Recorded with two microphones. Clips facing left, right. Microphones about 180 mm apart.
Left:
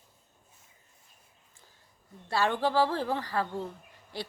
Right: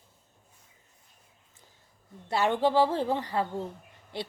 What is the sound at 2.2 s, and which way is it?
Speech, 20° right (ahead or behind).